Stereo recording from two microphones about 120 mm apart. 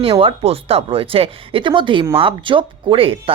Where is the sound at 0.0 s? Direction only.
50° right (ahead or behind).